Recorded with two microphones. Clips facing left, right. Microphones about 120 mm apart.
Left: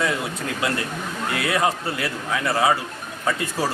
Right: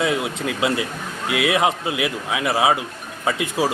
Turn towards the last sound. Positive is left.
turn(degrees=-15)  # may be behind; listen again after turning